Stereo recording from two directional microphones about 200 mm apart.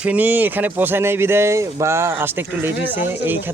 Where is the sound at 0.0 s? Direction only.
5° right (ahead or behind).